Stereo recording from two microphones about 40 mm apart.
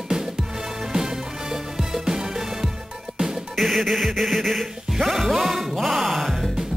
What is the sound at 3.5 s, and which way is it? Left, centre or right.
Music, centre.